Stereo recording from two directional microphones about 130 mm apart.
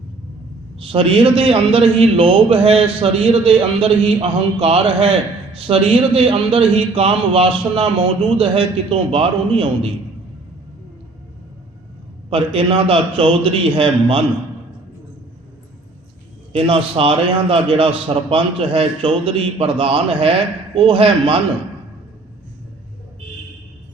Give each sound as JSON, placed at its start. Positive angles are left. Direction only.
{"t": 0.8, "sound": "a man's voice", "side_deg": -45}
{"t": 12.3, "sound": "a man's voice", "side_deg": -45}
{"t": 16.5, "sound": "a man's voice", "side_deg": -45}